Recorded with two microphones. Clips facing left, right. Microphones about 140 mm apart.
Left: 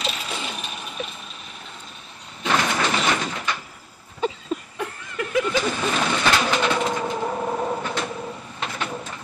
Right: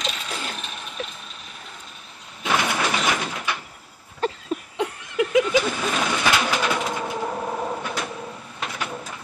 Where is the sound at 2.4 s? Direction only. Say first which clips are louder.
Left 1 dB; 10° right (ahead or behind).